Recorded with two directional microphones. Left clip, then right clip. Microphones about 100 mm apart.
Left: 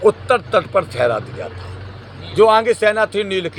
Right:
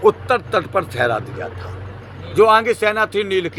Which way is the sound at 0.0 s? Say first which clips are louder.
Left 1 dB; 30° right (ahead or behind).